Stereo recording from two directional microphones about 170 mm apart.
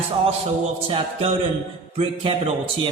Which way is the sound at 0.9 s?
30° right (ahead or behind).